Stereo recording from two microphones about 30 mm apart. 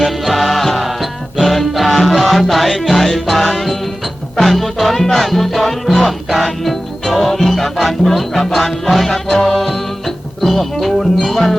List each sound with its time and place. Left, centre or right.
0.0 s music: centre